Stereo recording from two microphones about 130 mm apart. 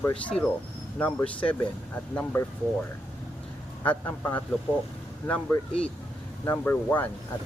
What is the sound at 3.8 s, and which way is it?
Speech, 15° left (ahead or behind).